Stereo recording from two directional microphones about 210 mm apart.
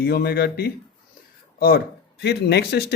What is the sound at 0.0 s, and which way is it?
Speech, 45° left (ahead or behind).